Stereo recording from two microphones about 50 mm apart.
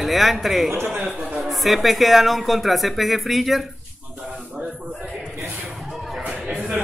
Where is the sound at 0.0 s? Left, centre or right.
Centre.